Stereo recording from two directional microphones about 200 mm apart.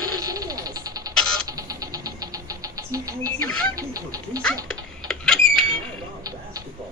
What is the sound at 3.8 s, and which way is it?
Speech, 15° right (ahead or behind).